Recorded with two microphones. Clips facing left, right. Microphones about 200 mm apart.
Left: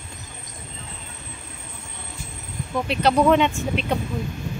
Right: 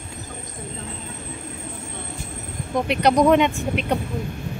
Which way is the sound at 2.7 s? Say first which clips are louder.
Right 2 dB; 15° right (ahead or behind).